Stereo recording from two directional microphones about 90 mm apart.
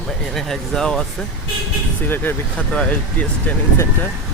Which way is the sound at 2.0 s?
25° left (ahead or behind).